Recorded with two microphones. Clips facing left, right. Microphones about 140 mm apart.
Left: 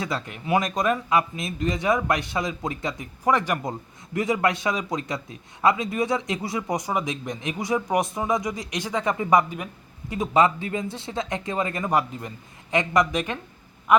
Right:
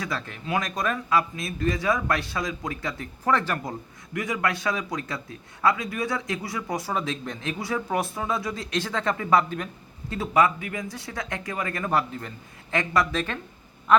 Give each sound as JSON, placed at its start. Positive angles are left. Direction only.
{"t": 0.0, "sound": "a man's voice", "side_deg": 20}